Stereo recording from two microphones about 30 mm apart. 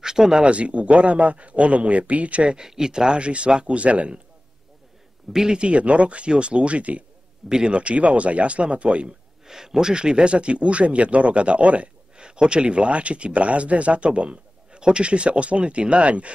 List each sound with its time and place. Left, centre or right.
0.0 s a sound: right
0.4 s speech: right
2.6 s speech: right
3.2 s speech: right
5.3 s speech: centre
5.6 s speech: right
7.4 s speech: right
7.7 s speech: right
9.5 s speech: centre; by 11.9 s right
12.2 s speech: right